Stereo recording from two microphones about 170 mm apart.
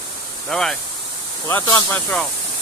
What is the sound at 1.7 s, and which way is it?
Speech, 15° left (ahead or behind).